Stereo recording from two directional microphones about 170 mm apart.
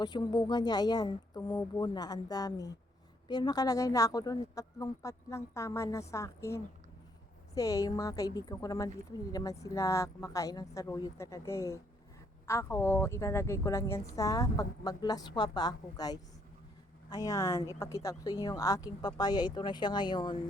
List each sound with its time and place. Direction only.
0.0 s a woman's voice: 25° left (ahead or behind)